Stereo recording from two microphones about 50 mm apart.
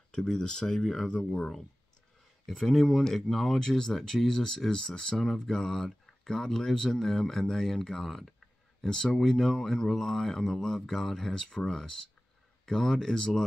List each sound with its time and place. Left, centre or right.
0.1 s speech: centre
2.4 s speech: centre
3.5 s speech: centre